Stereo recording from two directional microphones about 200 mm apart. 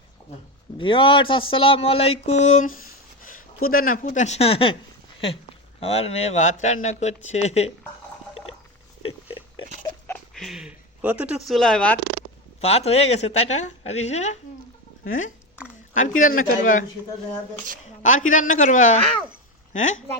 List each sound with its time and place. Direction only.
0.8 s speech: 25° left (ahead or behind)
5.8 s speech: 30° left (ahead or behind)
10.1 s a sound: centre (ahead or behind)
12.5 s speech: 30° left (ahead or behind)
16.0 s speech: 40° left (ahead or behind)
18.0 s speech: 40° left (ahead or behind)